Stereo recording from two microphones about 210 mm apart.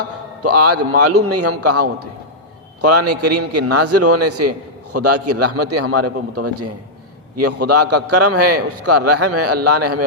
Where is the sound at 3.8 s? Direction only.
90° right.